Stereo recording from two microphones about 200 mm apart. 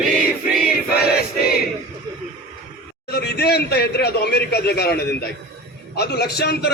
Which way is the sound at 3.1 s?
55° left (ahead or behind).